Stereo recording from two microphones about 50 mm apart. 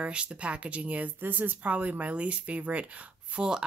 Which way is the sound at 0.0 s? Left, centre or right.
Right.